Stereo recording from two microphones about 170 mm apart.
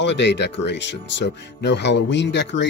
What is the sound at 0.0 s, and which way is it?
Speech, 90° left.